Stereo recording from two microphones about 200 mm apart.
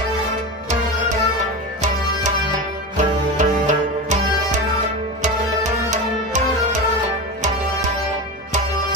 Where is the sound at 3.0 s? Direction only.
35° right (ahead or behind).